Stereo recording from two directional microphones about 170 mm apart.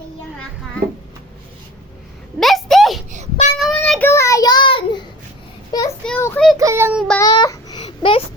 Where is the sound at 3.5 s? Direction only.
Centre (ahead or behind); by 5.1 s 30° left (ahead or behind).